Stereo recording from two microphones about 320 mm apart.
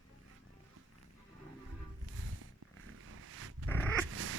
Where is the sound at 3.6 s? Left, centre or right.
Centre.